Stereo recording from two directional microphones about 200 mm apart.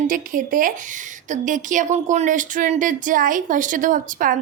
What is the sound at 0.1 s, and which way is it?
A woman's voice, 40° right (ahead or behind).